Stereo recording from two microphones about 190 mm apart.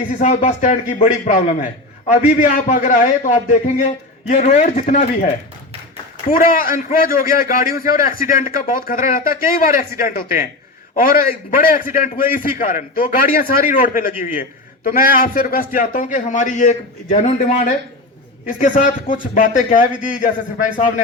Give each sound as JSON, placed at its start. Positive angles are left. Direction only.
{"t": 0.1, "sound": "a man's voice", "side_deg": 40}
{"t": 6.3, "sound": "a man's voice", "side_deg": 45}